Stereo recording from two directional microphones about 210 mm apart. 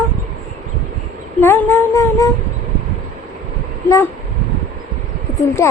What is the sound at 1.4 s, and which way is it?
Speech, 10° left (ahead or behind).